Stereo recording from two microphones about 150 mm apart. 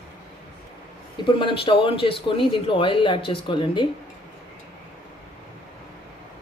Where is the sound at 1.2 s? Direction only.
35° left (ahead or behind).